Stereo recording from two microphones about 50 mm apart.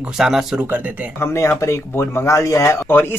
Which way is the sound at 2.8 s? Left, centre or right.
Left.